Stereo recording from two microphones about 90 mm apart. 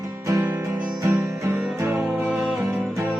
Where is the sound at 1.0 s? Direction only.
25° right (ahead or behind).